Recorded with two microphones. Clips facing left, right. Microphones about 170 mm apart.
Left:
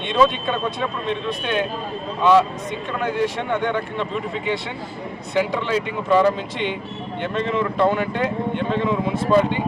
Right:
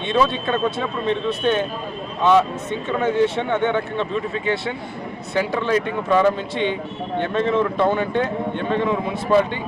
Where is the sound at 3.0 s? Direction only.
10° left (ahead or behind).